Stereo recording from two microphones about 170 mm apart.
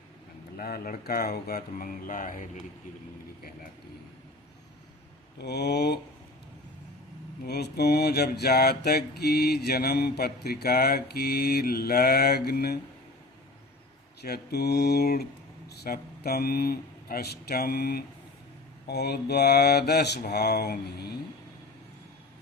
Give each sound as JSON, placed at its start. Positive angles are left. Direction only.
{"t": 0.5, "sound": "speech", "side_deg": 60}
{"t": 5.4, "sound": "mantra", "side_deg": 75}
{"t": 7.4, "sound": "mantra", "side_deg": 70}
{"t": 14.2, "sound": "mantra", "side_deg": 65}
{"t": 15.7, "sound": "speech", "side_deg": 70}
{"t": 18.9, "sound": "mantra", "side_deg": 70}